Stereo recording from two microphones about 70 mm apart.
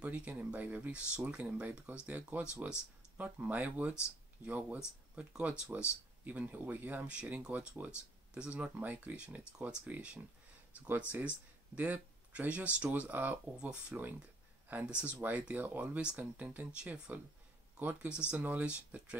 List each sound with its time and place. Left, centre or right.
0.0 s speech: right
13.6 s speech: centre